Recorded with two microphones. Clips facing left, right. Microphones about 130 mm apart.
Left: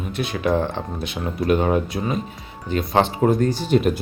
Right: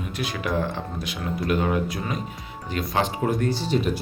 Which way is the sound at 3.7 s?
55° left (ahead or behind).